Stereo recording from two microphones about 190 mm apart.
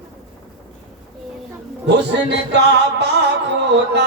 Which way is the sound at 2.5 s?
65° right (ahead or behind).